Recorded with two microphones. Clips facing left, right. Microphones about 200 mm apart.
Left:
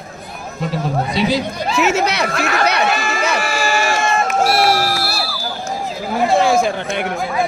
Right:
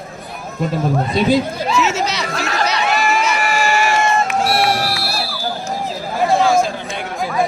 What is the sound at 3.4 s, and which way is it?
Music, 40° left (ahead or behind).